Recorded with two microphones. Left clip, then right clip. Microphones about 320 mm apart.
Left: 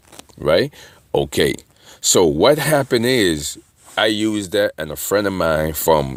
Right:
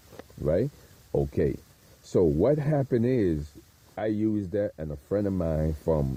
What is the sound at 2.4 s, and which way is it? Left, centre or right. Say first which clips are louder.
Speech: left 11 dB; centre.